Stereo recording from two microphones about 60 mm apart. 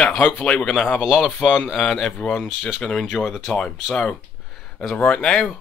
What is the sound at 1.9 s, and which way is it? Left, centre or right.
Speech, centre.